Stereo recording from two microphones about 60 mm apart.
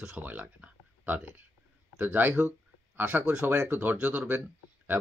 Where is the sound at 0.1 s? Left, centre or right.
Right.